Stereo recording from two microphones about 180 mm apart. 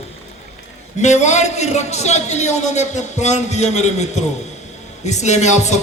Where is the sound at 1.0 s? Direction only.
40° left (ahead or behind).